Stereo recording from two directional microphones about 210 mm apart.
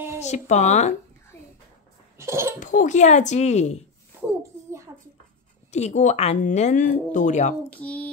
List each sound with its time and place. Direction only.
0.2 s speech: 35° left (ahead or behind)
2.1 s laughter: 15° right (ahead or behind)
2.6 s speech: 35° left (ahead or behind)
4.4 s a sound: 15° right (ahead or behind)
5.7 s speech: 35° left (ahead or behind)
7.7 s a sound: 5° left (ahead or behind)